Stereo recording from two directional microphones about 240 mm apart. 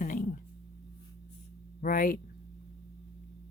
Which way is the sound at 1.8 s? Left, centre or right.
Left.